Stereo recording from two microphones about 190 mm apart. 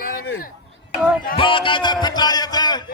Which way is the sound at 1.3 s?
25° left (ahead or behind).